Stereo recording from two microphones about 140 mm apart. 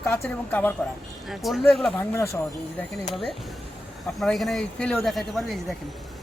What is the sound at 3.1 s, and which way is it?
Speech, centre (ahead or behind).